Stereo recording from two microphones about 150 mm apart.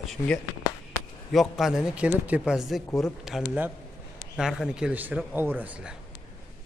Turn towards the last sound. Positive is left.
turn(degrees=-10)  # may be behind; listen again after turning